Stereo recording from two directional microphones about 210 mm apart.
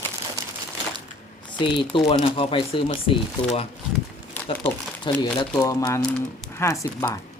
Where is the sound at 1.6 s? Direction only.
25° left (ahead or behind).